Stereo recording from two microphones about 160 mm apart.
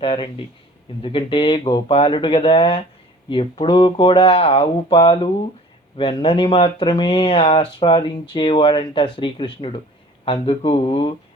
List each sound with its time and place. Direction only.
0.0 s speech: 35° left (ahead or behind)